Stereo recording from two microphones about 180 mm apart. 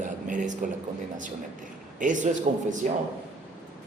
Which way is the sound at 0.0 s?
45° right (ahead or behind).